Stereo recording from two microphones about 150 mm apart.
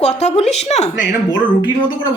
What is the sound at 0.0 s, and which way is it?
Speech, 50° left (ahead or behind).